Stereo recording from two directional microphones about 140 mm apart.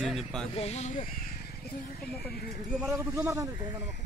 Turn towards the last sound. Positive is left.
turn(degrees=-20)  # may be behind; listen again after turning